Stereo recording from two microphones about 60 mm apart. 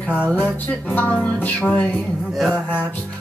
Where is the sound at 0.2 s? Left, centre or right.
Left.